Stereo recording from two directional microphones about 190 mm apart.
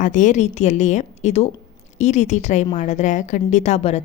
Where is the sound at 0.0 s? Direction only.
40° left (ahead or behind).